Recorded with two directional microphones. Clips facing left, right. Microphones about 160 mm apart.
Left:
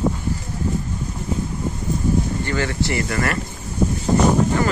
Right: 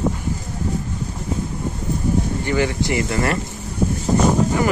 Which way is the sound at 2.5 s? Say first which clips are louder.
Right 3 dB; 15° right (ahead or behind).